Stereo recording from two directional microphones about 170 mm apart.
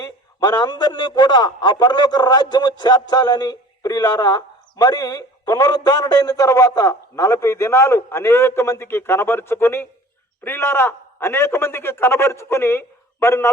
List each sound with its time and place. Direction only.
0.0 s a man's voice: 20° left (ahead or behind)